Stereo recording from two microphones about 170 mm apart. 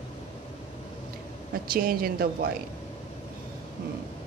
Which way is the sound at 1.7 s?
60° right (ahead or behind).